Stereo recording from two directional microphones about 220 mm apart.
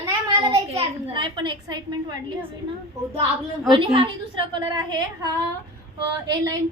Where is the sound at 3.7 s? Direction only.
25° right (ahead or behind).